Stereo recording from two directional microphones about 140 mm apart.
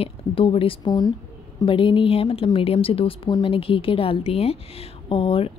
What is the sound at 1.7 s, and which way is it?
A woman's voice, 35° left (ahead or behind).